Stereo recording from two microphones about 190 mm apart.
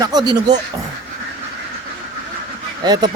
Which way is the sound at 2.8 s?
20° right (ahead or behind).